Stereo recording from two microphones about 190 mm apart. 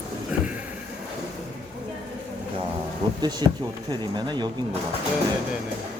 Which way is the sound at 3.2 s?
20° right (ahead or behind).